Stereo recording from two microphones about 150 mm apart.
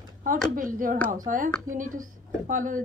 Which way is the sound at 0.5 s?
65° right (ahead or behind).